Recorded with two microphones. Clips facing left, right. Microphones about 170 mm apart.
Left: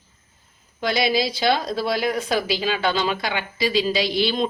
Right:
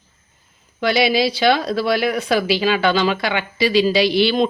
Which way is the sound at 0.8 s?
75° right (ahead or behind).